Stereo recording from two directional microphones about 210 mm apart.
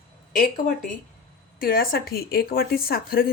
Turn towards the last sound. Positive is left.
turn(degrees=45)  # may be behind; listen again after turning